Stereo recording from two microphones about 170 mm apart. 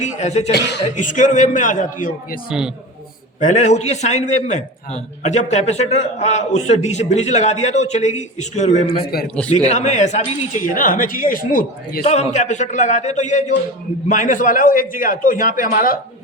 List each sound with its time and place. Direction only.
0.0 s a man's voice: 40° left (ahead or behind)
2.5 s a man's voice: 5° right (ahead or behind)
3.4 s a man's voice: 45° left (ahead or behind)
9.1 s speech: 60° left (ahead or behind)
9.6 s a man's voice: 40° left (ahead or behind)
10.8 s a man's voice: 55° left (ahead or behind)
12.0 s a man's voice: 40° left (ahead or behind)